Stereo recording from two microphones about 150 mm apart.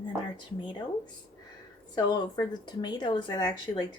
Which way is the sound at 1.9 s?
30° left (ahead or behind).